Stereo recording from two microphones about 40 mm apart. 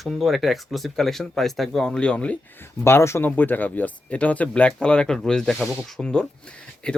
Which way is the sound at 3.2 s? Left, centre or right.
Left.